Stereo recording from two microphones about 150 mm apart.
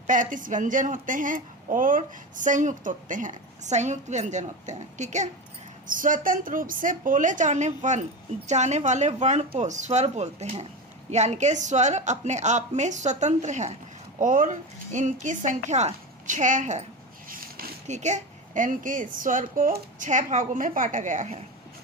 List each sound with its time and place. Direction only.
0.1 s a woman's voice: 60° right (ahead or behind)
5.9 s a woman's voice: 65° right (ahead or behind)
17.8 s a woman's voice: 50° right (ahead or behind)